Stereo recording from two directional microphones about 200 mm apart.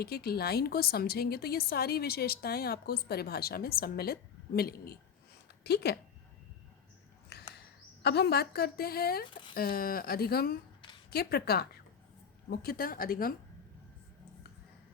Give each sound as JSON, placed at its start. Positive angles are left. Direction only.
{"t": 0.0, "sound": "a woman's voice", "side_deg": 50}
{"t": 8.0, "sound": "a woman's voice", "side_deg": 55}